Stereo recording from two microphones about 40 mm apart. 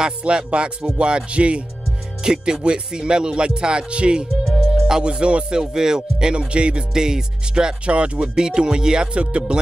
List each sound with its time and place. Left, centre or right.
0.2 s music: right
2.2 s music: centre
4.7 s music: centre
5.0 s music: right
6.9 s music: centre
7.8 s music: right